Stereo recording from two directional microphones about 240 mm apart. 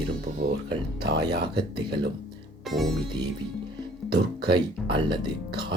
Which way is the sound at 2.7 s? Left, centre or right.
Centre.